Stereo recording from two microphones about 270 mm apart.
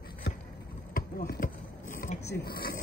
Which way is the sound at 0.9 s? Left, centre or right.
Left.